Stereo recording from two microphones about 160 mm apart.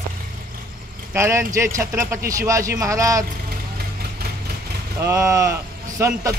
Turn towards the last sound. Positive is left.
turn(degrees=-20)  # may be behind; listen again after turning